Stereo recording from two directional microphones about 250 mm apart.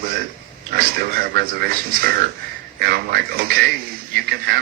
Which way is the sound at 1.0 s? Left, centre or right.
Right.